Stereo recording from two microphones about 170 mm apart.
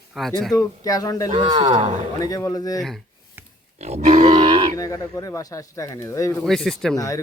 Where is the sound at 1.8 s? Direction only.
40° right (ahead or behind).